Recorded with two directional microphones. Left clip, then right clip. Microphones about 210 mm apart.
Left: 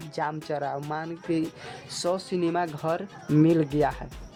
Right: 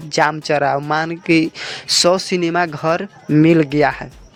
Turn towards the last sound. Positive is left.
turn(degrees=-20)  # may be behind; listen again after turning